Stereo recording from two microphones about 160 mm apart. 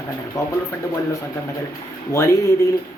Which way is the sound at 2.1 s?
20° left (ahead or behind).